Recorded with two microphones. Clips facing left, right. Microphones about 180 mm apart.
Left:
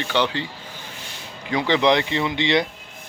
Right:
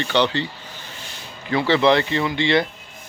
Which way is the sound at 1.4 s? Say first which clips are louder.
Right 2 dB; 15° left (ahead or behind).